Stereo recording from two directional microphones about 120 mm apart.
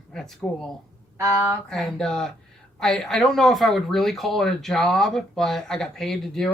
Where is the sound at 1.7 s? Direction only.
5° left (ahead or behind).